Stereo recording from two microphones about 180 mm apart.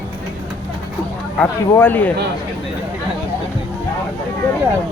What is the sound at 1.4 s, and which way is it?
Speech, 10° left (ahead or behind).